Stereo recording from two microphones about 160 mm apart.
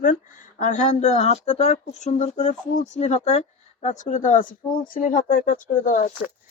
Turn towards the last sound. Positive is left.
turn(degrees=55)  # may be behind; listen again after turning